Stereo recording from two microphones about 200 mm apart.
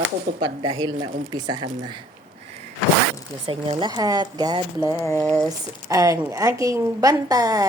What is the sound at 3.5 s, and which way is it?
A woman's voice, 20° right (ahead or behind).